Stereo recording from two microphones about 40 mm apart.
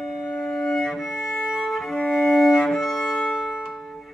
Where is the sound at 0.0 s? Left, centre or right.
Centre.